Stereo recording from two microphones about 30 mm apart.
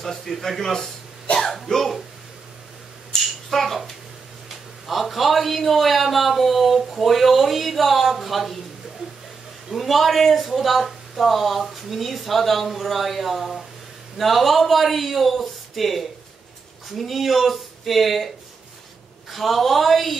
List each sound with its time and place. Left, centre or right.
0.0 s speech: centre
3.4 s speech: centre
4.8 s speech: centre
9.7 s speech: centre
19.3 s speech: centre